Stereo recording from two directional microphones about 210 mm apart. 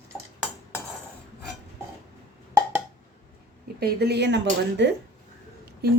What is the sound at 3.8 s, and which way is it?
Speech, 50° right (ahead or behind).